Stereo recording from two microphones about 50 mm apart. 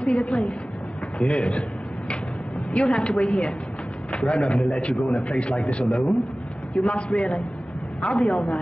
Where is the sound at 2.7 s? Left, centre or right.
Centre.